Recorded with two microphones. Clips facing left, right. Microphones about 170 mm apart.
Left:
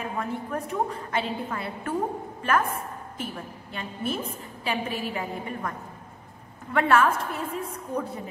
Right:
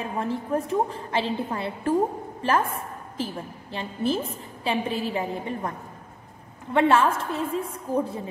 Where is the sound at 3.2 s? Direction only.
30° right (ahead or behind).